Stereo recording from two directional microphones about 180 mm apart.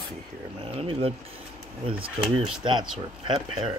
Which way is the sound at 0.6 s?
30° right (ahead or behind).